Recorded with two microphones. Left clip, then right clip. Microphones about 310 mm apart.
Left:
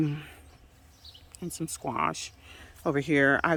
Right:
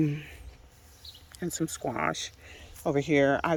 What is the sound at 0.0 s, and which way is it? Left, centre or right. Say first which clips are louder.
Speech: right 1 dB; centre.